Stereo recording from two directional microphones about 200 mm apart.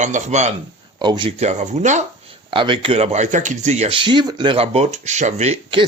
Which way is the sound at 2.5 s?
25° right (ahead or behind).